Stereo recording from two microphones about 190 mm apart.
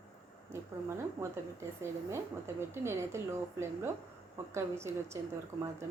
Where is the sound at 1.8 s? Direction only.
15° right (ahead or behind).